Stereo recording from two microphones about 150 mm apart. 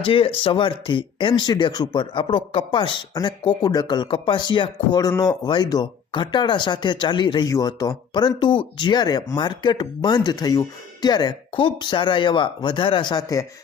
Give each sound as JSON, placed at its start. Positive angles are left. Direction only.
{"t": 0.0, "sound": "speech", "side_deg": 35}